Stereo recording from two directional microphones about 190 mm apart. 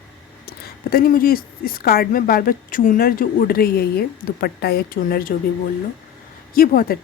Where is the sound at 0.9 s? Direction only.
50° left (ahead or behind).